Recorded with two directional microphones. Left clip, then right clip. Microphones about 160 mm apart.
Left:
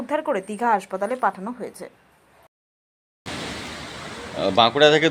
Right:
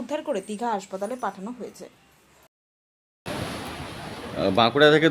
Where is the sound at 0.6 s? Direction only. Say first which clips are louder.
Left 6 dB; 20° left (ahead or behind).